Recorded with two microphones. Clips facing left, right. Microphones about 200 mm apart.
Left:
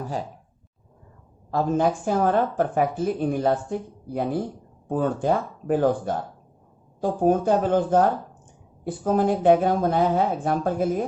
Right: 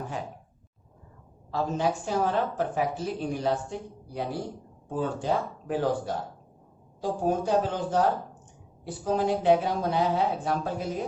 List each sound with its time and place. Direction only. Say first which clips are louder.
1.5 s speech: left 5 dB; 50° left (ahead or behind)